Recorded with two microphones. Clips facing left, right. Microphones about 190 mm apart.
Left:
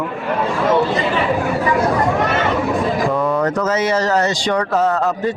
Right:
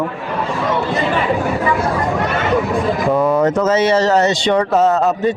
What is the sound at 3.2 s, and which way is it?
A man's voice, 20° right (ahead or behind).